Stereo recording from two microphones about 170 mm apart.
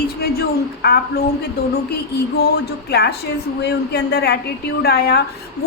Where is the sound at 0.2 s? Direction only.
65° left (ahead or behind).